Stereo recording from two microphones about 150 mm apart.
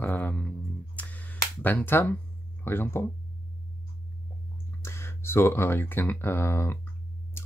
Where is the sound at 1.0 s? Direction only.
10° left (ahead or behind).